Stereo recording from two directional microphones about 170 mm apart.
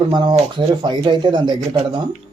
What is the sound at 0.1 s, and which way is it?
Speech, 25° right (ahead or behind).